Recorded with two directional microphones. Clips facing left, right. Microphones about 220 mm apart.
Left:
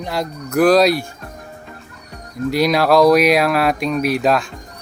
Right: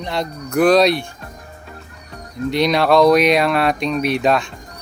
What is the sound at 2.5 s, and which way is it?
Speech, 5° left (ahead or behind).